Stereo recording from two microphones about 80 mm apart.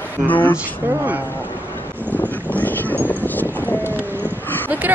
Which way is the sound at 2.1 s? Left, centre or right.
Left.